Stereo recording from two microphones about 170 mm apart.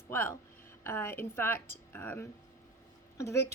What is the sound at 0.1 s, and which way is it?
A woman's voice, 15° left (ahead or behind).